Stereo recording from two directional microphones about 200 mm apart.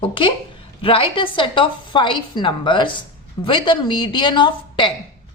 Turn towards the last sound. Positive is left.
turn(degrees=25)  # may be behind; listen again after turning